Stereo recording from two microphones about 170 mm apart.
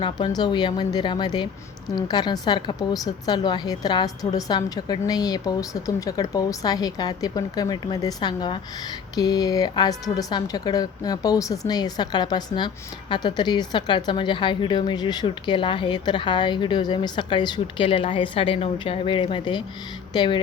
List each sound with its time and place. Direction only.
0.0 s a woman's voice: 25° left (ahead or behind)